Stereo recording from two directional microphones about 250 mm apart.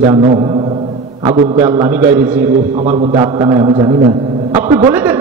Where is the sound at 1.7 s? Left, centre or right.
Centre.